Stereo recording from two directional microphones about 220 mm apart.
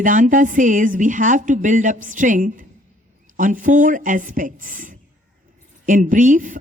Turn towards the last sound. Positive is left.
turn(degrees=-40)  # may be behind; listen again after turning